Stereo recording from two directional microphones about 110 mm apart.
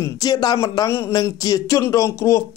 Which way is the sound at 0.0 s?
35° left (ahead or behind).